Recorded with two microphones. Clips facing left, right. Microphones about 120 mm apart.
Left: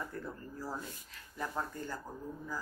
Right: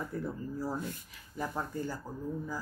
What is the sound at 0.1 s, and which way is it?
Speech, 15° right (ahead or behind).